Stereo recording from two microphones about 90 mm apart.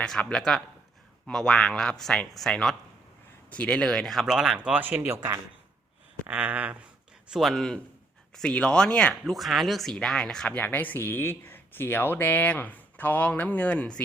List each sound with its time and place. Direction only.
0.0 s speech: 10° left (ahead or behind)
4.4 s speech: 10° right (ahead or behind); by 5.3 s 25° right (ahead or behind)
6.2 s a sound: 15° right (ahead or behind)
7.3 s speech: centre (ahead or behind)
9.3 s speech: centre (ahead or behind)
10.6 s speech: 20° left (ahead or behind)